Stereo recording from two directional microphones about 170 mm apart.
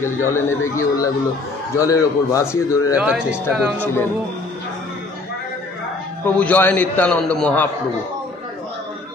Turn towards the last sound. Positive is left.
turn(degrees=5)  # may be behind; listen again after turning